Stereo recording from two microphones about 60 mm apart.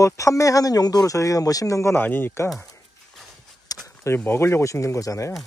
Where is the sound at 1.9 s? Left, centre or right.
Left.